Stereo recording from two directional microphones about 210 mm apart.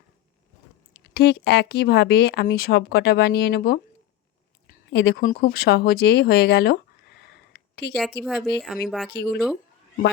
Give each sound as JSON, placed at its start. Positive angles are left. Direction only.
{"t": 0.9, "sound": "speech", "side_deg": 50}
{"t": 4.9, "sound": "speech", "side_deg": 50}
{"t": 7.3, "sound": "a sound", "side_deg": 50}
{"t": 7.9, "sound": "a woman's voice", "side_deg": 0}